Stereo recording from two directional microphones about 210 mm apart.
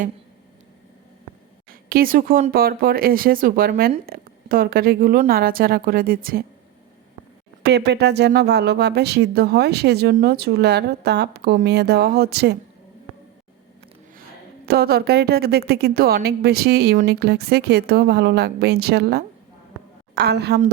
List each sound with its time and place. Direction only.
1.9 s speech: 45° right (ahead or behind)
7.6 s speech: 55° right (ahead or behind)
14.7 s speech: 45° right (ahead or behind)